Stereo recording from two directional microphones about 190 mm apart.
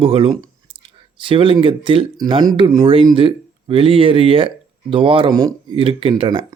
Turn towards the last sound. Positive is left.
turn(degrees=-25)  # may be behind; listen again after turning